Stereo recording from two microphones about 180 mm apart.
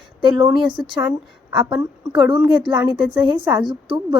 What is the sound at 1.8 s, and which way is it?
A woman's voice, 25° right (ahead or behind).